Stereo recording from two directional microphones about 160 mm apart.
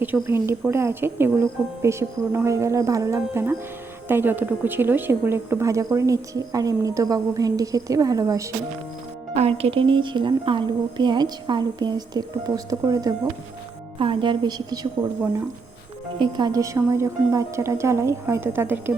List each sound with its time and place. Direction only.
0.0 s a woman's voice: 15° right (ahead or behind)
9.3 s a woman's voice: 40° right (ahead or behind)
16.1 s speech: 30° right (ahead or behind); by 18.9 s 15° right (ahead or behind)